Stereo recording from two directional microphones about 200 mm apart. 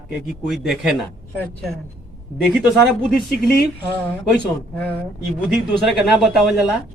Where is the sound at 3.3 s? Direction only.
50° left (ahead or behind).